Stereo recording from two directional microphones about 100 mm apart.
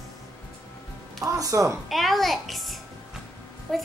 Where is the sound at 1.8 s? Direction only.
Centre (ahead or behind).